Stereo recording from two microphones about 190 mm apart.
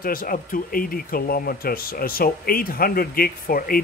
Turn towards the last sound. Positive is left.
turn(degrees=50)  # may be behind; listen again after turning